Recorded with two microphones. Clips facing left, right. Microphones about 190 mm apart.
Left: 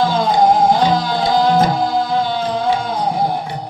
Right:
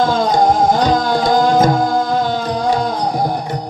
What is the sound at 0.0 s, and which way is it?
Music, 45° right (ahead or behind).